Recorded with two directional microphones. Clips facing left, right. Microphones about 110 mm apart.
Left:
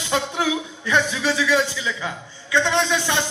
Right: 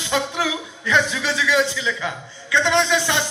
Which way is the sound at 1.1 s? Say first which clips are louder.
Left 1 dB; 45° left (ahead or behind).